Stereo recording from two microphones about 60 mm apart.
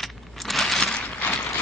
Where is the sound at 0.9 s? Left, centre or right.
Left.